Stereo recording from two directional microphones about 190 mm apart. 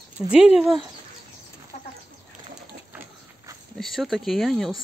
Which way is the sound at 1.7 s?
40° left (ahead or behind).